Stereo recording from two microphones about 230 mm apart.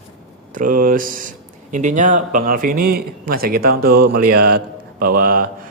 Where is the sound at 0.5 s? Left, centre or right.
Right.